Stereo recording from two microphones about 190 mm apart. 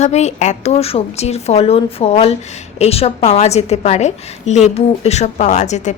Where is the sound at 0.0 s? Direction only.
35° left (ahead or behind).